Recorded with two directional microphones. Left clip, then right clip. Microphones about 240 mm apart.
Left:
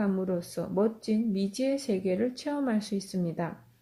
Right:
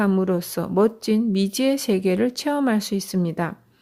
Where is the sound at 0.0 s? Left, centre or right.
Right.